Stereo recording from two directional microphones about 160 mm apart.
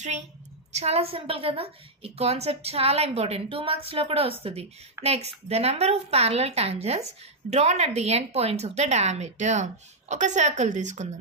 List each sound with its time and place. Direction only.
0.7 s a woman's voice: 40° right (ahead or behind)